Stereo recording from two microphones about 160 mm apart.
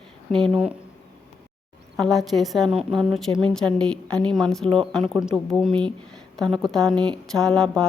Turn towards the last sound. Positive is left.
turn(degrees=5)  # may be behind; listen again after turning